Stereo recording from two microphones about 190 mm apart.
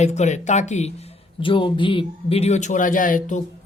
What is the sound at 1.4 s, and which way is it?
Speech, 25° left (ahead or behind).